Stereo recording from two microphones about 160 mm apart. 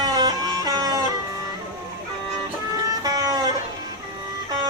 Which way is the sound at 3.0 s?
25° right (ahead or behind).